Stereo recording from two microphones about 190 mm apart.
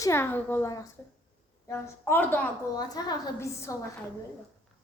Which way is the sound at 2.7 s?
20° left (ahead or behind).